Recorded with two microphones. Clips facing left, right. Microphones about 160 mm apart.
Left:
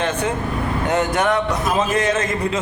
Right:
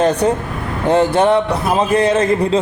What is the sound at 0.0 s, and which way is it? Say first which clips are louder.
A man's voice: right 7 dB; 35° right (ahead or behind).